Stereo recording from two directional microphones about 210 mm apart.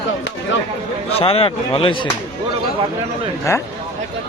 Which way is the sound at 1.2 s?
25° left (ahead or behind).